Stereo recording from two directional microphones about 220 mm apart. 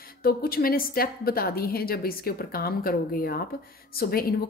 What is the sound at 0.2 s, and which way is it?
Speech, 45° left (ahead or behind).